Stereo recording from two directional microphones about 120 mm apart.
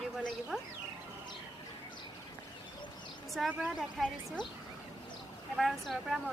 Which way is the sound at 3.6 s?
5° right (ahead or behind).